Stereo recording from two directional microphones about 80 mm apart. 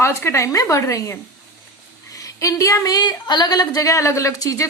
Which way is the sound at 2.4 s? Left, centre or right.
Left.